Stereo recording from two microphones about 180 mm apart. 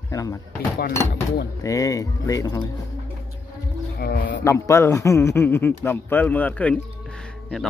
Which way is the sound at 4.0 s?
55° left (ahead or behind).